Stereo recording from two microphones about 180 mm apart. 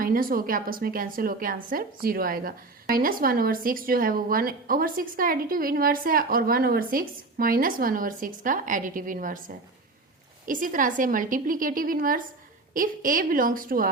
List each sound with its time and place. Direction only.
0.0 s speech: 50° right (ahead or behind)
10.4 s speech: 50° right (ahead or behind)